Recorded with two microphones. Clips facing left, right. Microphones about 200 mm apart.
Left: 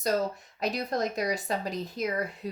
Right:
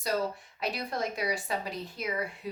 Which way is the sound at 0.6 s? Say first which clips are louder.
Left 4 dB; 40° left (ahead or behind).